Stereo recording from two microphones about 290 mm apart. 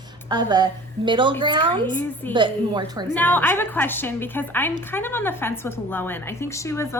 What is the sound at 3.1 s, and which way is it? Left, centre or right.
A woman's voice, centre.